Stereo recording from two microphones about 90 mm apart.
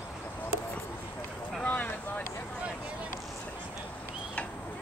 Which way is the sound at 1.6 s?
20° left (ahead or behind).